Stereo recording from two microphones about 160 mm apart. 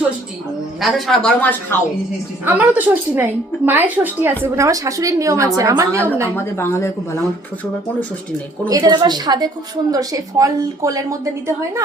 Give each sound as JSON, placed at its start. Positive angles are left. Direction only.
{"t": 0.8, "sound": "speech", "side_deg": 0}
{"t": 2.4, "sound": "a woman's voice", "side_deg": -10}
{"t": 6.3, "sound": "speech", "side_deg": 15}
{"t": 8.6, "sound": "a woman's voice", "side_deg": -25}